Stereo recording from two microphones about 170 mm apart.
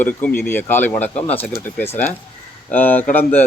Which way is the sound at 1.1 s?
40° left (ahead or behind).